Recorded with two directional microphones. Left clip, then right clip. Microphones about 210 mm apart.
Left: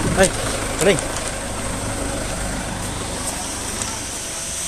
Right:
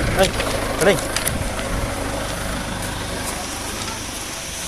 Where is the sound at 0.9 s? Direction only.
20° left (ahead or behind).